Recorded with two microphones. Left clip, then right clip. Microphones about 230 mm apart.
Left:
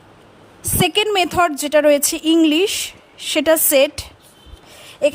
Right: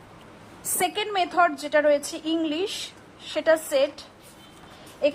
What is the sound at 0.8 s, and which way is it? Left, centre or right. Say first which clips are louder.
A woman's voice: left 9 dB; left.